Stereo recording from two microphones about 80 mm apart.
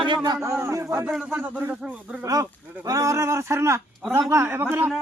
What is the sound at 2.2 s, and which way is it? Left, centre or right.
A man's voice, right.